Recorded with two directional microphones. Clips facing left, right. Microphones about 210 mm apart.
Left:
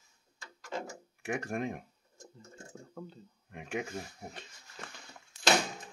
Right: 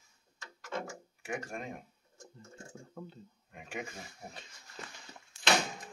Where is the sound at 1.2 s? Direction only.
65° left (ahead or behind).